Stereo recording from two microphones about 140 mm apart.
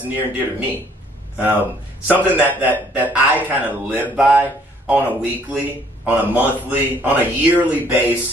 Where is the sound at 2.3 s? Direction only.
10° right (ahead or behind).